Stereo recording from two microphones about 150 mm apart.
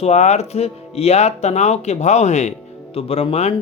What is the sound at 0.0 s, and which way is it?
Speech, 50° left (ahead or behind).